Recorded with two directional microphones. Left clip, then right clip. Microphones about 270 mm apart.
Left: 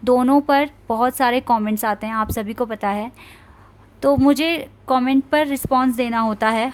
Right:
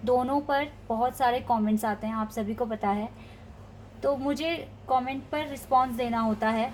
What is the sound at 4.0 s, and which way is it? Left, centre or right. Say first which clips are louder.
A woman's voice: left 11 dB; left.